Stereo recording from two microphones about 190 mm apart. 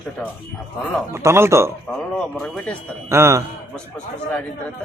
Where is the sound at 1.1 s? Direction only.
15° right (ahead or behind).